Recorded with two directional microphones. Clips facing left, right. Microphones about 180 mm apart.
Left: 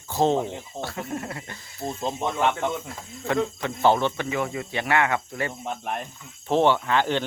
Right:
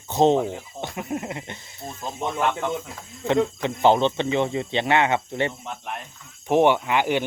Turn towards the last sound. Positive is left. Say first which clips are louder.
# right 1 dB
turn(degrees=-10)  # may be behind; listen again after turning